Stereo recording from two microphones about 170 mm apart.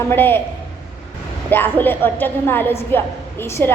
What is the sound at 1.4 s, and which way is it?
A woman's voice, 10° left (ahead or behind).